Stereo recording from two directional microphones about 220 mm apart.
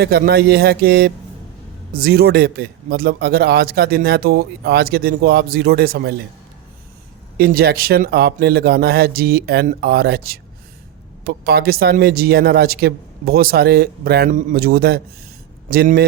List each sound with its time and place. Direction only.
0.0 s a man's voice: 45° right (ahead or behind)
7.3 s a man's voice: 45° right (ahead or behind)